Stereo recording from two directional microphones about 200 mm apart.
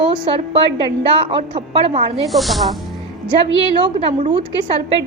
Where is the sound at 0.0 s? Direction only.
25° right (ahead or behind).